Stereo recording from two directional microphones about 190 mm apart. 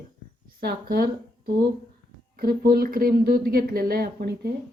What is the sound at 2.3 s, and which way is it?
Speech, 50° right (ahead or behind).